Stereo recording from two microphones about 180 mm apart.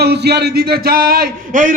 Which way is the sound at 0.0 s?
65° right (ahead or behind).